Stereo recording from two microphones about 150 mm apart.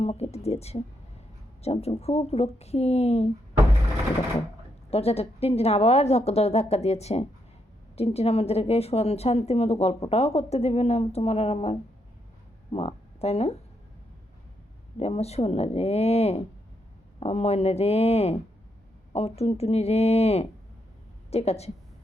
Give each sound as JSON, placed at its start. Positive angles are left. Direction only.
{"t": 0.0, "sound": "a woman's voice", "side_deg": 45}
{"t": 4.9, "sound": "a woman's voice", "side_deg": 40}
{"t": 14.9, "sound": "a woman's voice", "side_deg": 45}